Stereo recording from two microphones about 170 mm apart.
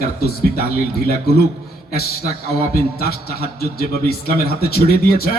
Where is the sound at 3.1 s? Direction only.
65° left (ahead or behind).